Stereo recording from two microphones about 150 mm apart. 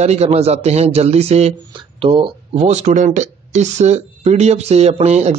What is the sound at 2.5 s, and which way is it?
Speech, 50° right (ahead or behind).